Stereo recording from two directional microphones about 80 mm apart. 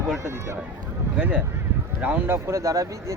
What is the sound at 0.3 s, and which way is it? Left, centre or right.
Speech, right.